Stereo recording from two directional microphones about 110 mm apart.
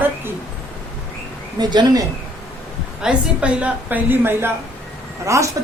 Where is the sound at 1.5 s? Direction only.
40° right (ahead or behind).